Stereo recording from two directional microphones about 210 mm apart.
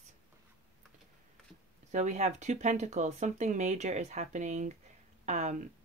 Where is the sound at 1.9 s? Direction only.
35° right (ahead or behind).